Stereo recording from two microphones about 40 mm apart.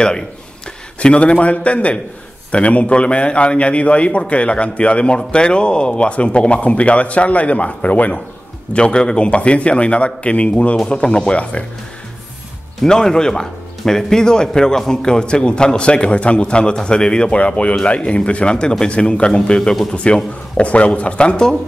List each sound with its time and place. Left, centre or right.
0.9 s speech: left
8.7 s speech: left
12.8 s a man's voice: centre